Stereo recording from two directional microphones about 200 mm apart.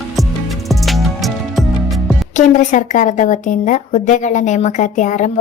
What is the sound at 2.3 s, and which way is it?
A woman's voice, 35° left (ahead or behind).